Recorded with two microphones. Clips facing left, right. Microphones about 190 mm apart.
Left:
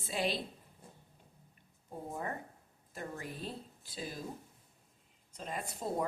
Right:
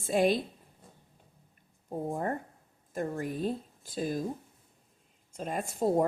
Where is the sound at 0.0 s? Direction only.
50° right (ahead or behind).